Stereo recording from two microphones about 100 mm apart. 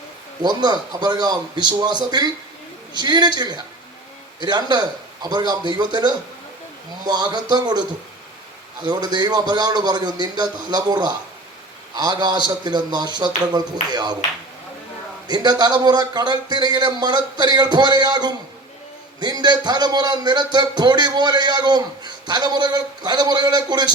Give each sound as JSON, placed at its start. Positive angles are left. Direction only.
{"t": 0.4, "sound": "a man's voice", "side_deg": -45}
{"t": 15.3, "sound": "a man's voice", "side_deg": -45}